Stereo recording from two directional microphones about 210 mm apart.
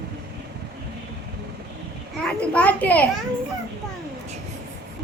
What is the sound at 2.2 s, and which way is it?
Speech, 5° left (ahead or behind).